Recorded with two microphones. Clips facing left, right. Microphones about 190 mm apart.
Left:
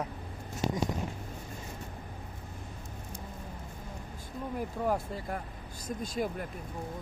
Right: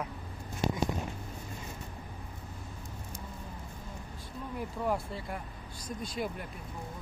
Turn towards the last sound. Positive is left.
turn(degrees=45)  # may be behind; listen again after turning